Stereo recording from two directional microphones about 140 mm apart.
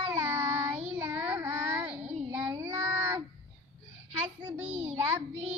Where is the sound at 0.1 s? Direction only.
20° right (ahead or behind).